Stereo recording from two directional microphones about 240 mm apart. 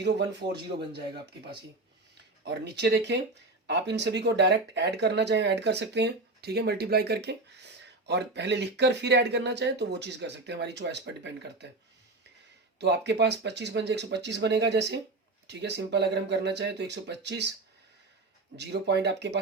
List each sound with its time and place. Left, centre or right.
2.4 s speech: right
12.8 s speech: right
18.5 s speech: right